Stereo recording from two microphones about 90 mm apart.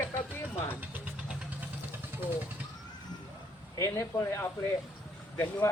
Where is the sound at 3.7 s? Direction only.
40° left (ahead or behind).